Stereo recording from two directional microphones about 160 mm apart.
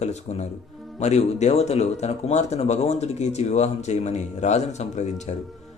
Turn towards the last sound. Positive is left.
turn(degrees=45)  # may be behind; listen again after turning